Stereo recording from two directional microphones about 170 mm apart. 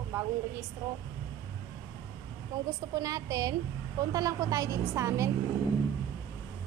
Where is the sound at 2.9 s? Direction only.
20° right (ahead or behind).